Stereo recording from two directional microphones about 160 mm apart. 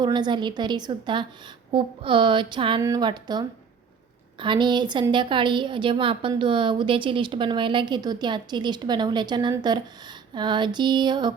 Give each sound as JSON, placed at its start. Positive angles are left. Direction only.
{"t": 0.0, "sound": "a woman's voice", "side_deg": -25}
{"t": 1.7, "sound": "a sound", "side_deg": -30}
{"t": 2.8, "sound": "a woman's voice", "side_deg": -25}